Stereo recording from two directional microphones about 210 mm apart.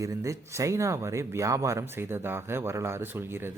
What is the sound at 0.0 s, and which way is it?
Speech, 15° right (ahead or behind).